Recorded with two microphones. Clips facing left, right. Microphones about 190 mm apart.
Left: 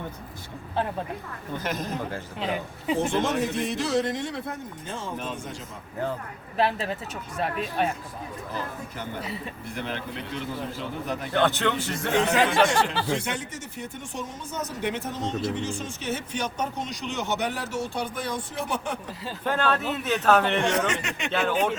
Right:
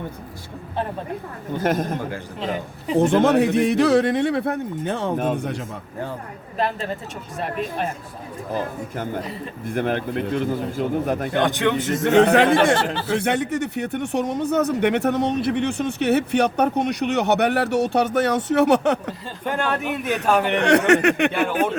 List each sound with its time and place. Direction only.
1.6 s a man's voice: 50° right (ahead or behind)
3.0 s speech: 60° right (ahead or behind)
6.6 s speech: 5° left (ahead or behind)
9.6 s a man's voice: 50° right (ahead or behind)
11.3 s a man's voice: 15° right (ahead or behind)
12.1 s speech: 60° right (ahead or behind)
19.5 s a man's voice: 15° right (ahead or behind)
20.6 s speech: 70° right (ahead or behind)
21.3 s a man's voice: 10° right (ahead or behind)